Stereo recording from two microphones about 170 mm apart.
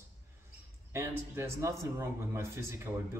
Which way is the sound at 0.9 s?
15° right (ahead or behind).